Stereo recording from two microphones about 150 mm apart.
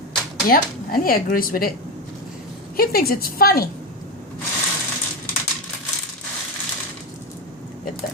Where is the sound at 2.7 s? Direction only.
90° left.